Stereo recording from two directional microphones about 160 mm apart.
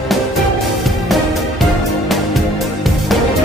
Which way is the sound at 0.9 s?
Centre (ahead or behind).